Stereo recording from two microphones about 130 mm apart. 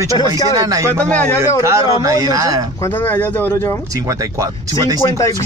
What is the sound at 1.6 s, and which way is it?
Speech, 25° right (ahead or behind).